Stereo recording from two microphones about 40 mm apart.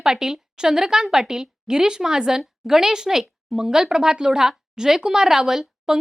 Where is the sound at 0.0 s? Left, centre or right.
Centre.